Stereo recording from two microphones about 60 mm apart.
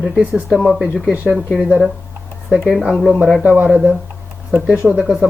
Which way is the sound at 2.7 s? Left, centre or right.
Centre.